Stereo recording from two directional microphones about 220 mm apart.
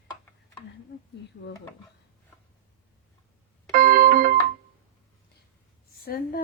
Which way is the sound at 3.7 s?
40° right (ahead or behind).